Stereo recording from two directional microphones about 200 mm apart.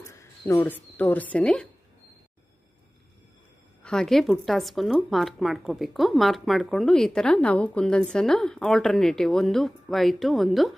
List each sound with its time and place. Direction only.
0.1 s speech: 15° left (ahead or behind)
3.8 s speech: 5° left (ahead or behind)